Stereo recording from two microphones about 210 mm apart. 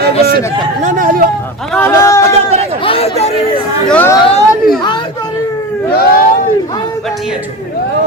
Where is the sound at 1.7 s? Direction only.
10° left (ahead or behind).